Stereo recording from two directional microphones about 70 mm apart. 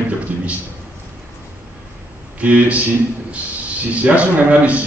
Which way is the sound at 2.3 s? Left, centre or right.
Right.